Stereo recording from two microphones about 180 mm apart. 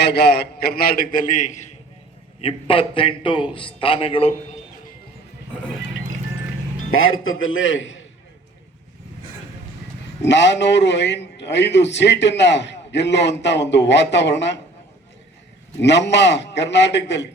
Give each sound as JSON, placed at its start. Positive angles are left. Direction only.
{"t": 0.0, "sound": "a man's voice", "side_deg": 65}
{"t": 2.4, "sound": "a man's voice", "side_deg": 30}
{"t": 7.3, "sound": "a man's voice", "side_deg": 90}
{"t": 10.2, "sound": "a man's voice", "side_deg": 75}
{"t": 15.8, "sound": "a man's voice", "side_deg": 75}